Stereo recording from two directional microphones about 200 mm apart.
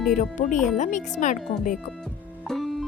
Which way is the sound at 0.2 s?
35° left (ahead or behind).